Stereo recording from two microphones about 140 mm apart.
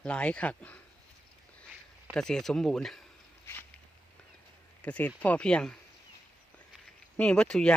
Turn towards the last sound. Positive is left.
turn(degrees=5)  # may be behind; listen again after turning